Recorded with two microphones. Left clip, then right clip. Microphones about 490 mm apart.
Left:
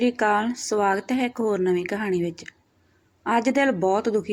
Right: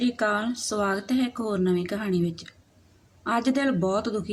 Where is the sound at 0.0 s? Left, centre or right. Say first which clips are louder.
Left 4 dB; right.